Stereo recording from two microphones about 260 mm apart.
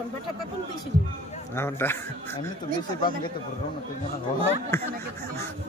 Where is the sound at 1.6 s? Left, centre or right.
Centre.